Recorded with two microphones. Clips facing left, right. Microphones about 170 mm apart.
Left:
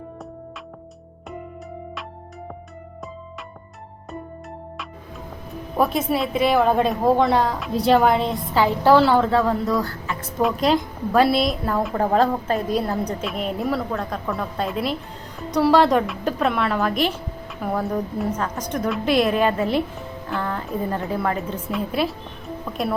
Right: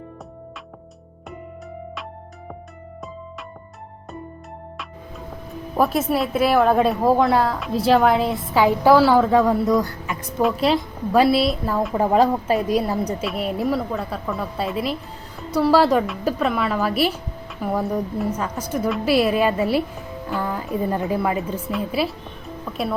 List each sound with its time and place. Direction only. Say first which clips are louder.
5.7 s a woman's voice: right 1 dB; 5° right (ahead or behind)
9.3 s a woman's voice: right 3 dB; 15° right (ahead or behind)
10.4 s a woman's voice: even; centre (ahead or behind)